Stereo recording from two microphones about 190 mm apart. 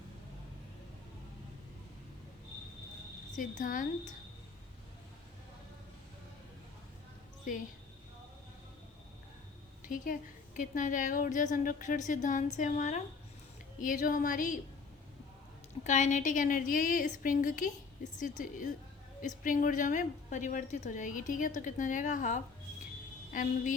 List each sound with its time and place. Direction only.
3.3 s a woman's voice: 45° left (ahead or behind)
9.8 s a woman's voice: 45° left (ahead or behind)
15.8 s a woman's voice: 40° left (ahead or behind)